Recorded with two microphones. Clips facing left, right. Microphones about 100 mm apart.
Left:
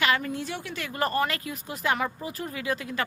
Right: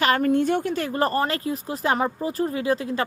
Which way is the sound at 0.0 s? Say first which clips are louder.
Right 7 dB; 50° right (ahead or behind).